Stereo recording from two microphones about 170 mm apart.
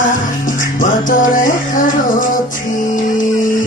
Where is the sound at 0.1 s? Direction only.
50° left (ahead or behind).